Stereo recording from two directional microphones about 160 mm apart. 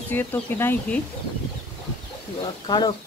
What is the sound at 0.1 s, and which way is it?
Speech, 10° left (ahead or behind).